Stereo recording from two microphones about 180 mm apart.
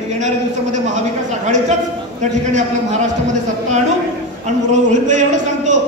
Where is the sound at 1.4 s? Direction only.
40° right (ahead or behind).